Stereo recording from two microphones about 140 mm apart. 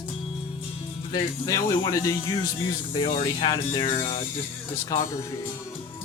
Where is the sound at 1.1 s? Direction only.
25° left (ahead or behind).